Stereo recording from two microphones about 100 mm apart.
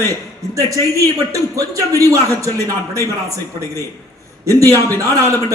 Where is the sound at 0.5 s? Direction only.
35° right (ahead or behind).